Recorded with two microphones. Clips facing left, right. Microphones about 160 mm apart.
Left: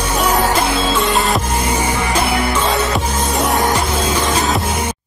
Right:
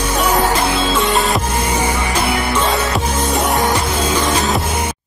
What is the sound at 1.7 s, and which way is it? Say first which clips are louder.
Music: left 1 dB; 10° left (ahead or behind).